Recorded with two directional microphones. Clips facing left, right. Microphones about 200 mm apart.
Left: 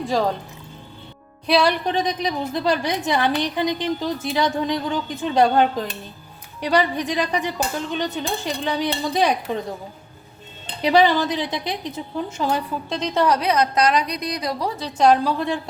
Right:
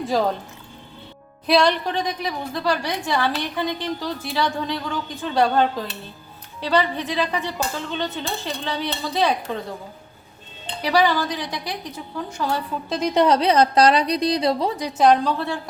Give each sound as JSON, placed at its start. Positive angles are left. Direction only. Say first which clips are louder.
{"t": 0.0, "sound": "speech", "louder": "even", "side_deg": 0}
{"t": 1.5, "sound": "speech", "louder": "right 1 dB", "side_deg": 0}
{"t": 1.8, "sound": "a woman's voice", "louder": "left 3 dB", "side_deg": 20}
{"t": 10.8, "sound": "a woman's voice", "louder": "left 3 dB", "side_deg": 20}
{"t": 12.9, "sound": "a woman's voice", "louder": "right 3 dB", "side_deg": -10}
{"t": 13.2, "sound": "a woman's voice", "louder": "right 2 dB", "side_deg": -25}
{"t": 14.9, "sound": "speech", "louder": "left 1 dB", "side_deg": 0}